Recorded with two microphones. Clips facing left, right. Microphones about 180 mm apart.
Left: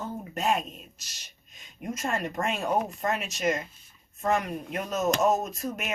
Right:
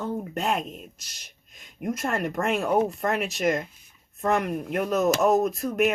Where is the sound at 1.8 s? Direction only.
65° right (ahead or behind).